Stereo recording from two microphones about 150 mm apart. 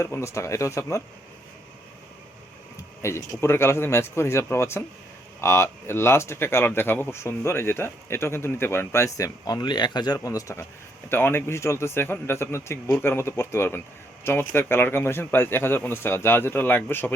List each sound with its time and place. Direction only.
0.0 s speech: 20° left (ahead or behind)
3.0 s speech: 20° left (ahead or behind)